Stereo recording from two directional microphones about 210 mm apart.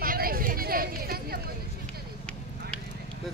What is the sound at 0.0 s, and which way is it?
Vehicle, 45° right (ahead or behind).